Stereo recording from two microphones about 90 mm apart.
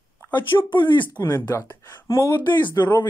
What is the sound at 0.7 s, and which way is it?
Speech, 60° left (ahead or behind).